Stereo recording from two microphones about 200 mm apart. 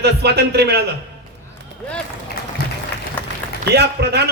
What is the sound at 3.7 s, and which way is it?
Speech, 55° right (ahead or behind).